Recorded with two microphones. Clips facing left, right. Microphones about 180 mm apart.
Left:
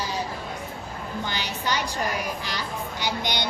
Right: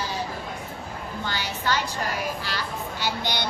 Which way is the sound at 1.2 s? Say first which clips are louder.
Right 2 dB; 15° left (ahead or behind).